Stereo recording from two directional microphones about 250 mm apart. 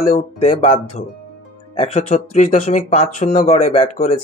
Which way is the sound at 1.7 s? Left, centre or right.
Left.